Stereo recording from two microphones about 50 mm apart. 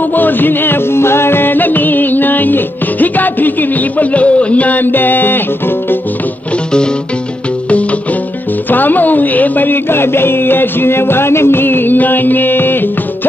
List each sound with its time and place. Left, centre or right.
0.1 s music: left
4.0 s music: left
8.6 s speech: left